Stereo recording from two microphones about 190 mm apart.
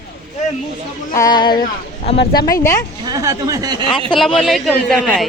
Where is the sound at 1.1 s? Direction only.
20° left (ahead or behind).